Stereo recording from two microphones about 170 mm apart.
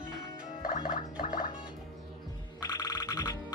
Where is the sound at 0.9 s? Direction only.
55° left (ahead or behind).